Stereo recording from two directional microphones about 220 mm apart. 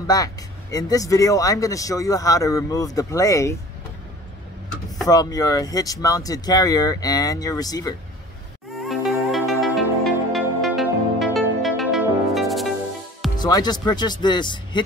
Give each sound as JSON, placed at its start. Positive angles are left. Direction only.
{"t": 0.0, "sound": "speech", "side_deg": 15}
{"t": 5.0, "sound": "speech", "side_deg": 15}
{"t": 8.8, "sound": "music", "side_deg": 0}
{"t": 13.4, "sound": "speech", "side_deg": 20}